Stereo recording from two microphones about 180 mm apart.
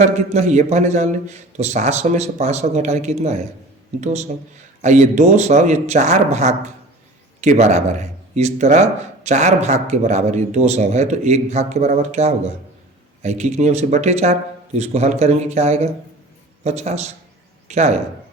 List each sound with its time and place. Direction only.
0.0 s a man's voice: 40° right (ahead or behind)